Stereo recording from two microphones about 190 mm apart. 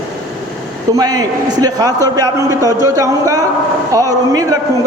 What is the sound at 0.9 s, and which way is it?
A man's voice, 20° right (ahead or behind).